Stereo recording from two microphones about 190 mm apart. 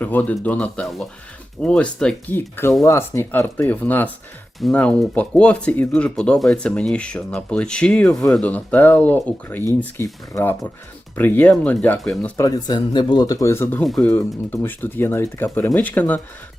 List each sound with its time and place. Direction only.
0.0 s speech: 10° left (ahead or behind)
12.4 s speech: 20° left (ahead or behind)